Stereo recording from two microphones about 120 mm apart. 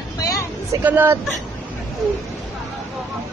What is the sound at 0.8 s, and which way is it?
Speech, 15° right (ahead or behind).